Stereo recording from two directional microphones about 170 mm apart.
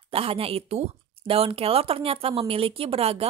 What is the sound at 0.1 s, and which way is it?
Speech, 35° right (ahead or behind).